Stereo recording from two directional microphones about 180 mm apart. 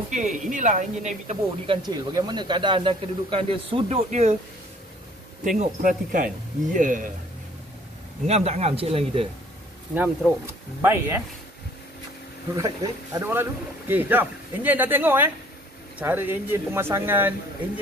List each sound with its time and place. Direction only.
0.1 s speech: 45° right (ahead or behind)
1.7 s speech: 25° right (ahead or behind); by 4.4 s 40° right (ahead or behind)
5.6 s speech: 50° right (ahead or behind)
8.3 s speech: 35° right (ahead or behind)
9.9 s speech: 10° right (ahead or behind)
12.5 s speech: 20° right (ahead or behind)